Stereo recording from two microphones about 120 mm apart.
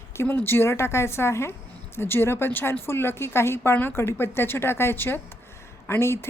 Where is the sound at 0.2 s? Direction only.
15° left (ahead or behind).